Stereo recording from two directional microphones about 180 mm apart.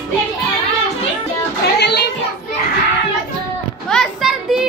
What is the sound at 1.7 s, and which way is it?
Music, 65° left (ahead or behind).